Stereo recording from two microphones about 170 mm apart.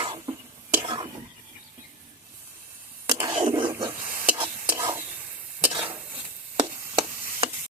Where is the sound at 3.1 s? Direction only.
25° right (ahead or behind).